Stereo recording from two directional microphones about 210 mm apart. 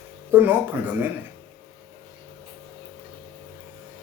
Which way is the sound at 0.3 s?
10° right (ahead or behind).